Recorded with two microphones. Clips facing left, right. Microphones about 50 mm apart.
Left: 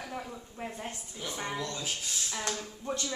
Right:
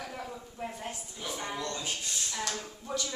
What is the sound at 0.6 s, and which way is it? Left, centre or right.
Speech, left.